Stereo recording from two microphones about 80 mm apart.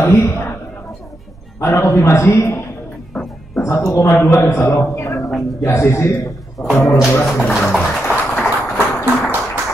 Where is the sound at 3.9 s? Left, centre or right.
Left.